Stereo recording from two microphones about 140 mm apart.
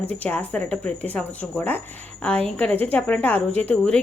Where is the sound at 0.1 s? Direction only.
10° left (ahead or behind).